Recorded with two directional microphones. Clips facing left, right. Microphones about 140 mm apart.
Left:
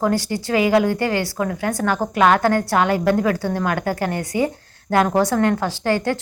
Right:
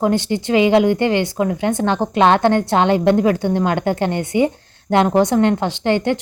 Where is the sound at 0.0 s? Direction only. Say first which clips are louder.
Right 3 dB; 20° right (ahead or behind).